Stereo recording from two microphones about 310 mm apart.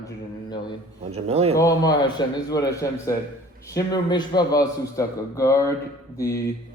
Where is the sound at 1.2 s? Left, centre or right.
Centre.